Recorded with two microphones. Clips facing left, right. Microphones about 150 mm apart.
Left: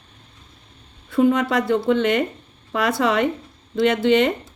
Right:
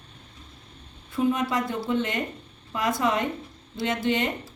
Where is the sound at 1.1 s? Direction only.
70° left (ahead or behind).